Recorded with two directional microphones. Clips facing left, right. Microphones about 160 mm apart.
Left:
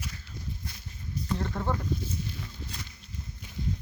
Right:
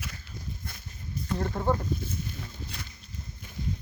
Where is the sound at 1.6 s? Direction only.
30° right (ahead or behind).